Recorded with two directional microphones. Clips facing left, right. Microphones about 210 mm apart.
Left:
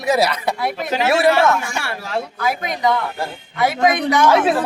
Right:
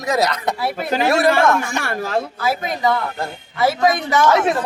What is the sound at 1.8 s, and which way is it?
Speech, 40° right (ahead or behind).